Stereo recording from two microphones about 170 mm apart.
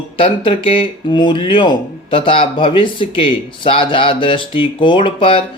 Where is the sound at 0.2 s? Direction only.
30° left (ahead or behind).